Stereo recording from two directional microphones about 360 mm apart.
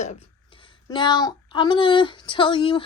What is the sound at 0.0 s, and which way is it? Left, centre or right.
Speech, centre.